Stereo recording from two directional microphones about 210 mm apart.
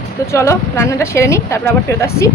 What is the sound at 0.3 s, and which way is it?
Speech, 15° left (ahead or behind).